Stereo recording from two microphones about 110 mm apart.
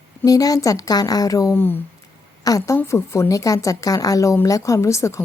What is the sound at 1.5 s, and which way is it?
A woman's voice, 20° left (ahead or behind).